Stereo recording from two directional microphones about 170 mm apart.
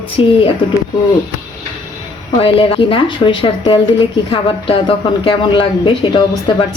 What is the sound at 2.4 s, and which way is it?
Speech, 30° left (ahead or behind).